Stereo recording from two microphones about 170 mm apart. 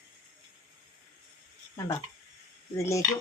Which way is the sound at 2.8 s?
15° left (ahead or behind).